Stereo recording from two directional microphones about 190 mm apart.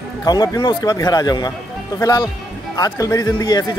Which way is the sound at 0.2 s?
20° left (ahead or behind).